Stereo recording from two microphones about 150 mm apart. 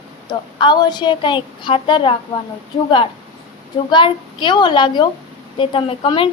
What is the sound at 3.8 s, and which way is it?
A woman's voice, 30° left (ahead or behind).